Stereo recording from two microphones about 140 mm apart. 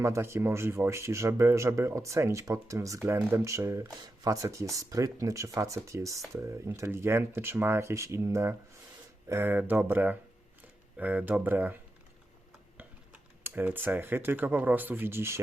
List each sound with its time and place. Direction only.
0.0 s speech: 20° right (ahead or behind)
13.4 s speech: 15° right (ahead or behind)